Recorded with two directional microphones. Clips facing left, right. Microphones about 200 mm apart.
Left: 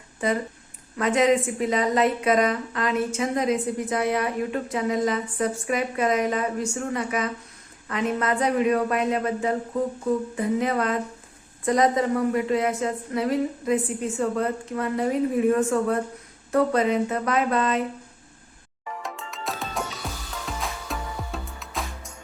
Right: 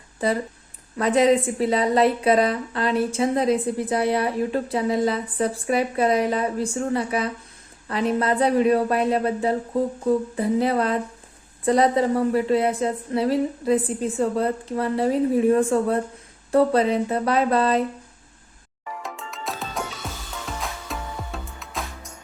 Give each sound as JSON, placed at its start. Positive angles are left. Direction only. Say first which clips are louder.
{"t": 0.2, "sound": "a woman's voice", "louder": "right 2 dB", "side_deg": -35}
{"t": 19.0, "sound": "music", "louder": "even", "side_deg": 0}